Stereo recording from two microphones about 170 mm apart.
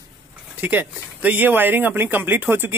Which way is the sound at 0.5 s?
10° right (ahead or behind).